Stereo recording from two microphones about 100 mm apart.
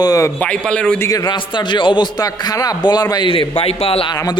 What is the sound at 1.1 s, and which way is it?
Speech, 40° left (ahead or behind).